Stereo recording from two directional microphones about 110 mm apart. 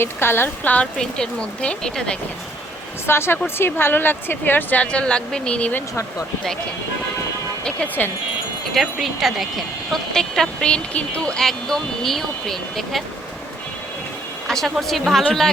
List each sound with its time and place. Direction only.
0.0 s speech: 20° left (ahead or behind)
3.1 s speech: 20° left (ahead or behind)
7.6 s speech: 10° left (ahead or behind)
8.7 s speech: centre (ahead or behind)
14.4 s speech: 5° left (ahead or behind)